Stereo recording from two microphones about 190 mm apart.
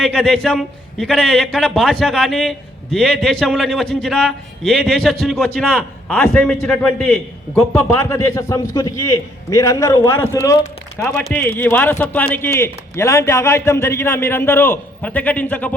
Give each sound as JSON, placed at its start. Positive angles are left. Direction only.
{"t": 0.0, "sound": "a man's voice", "side_deg": 5}